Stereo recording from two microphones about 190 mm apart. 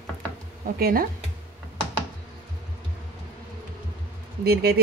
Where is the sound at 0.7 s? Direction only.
50° right (ahead or behind).